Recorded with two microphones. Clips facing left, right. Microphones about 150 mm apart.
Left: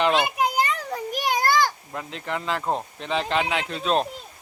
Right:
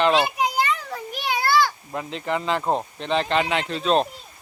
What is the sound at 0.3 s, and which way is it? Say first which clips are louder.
Children playing: even; 50° left (ahead or behind).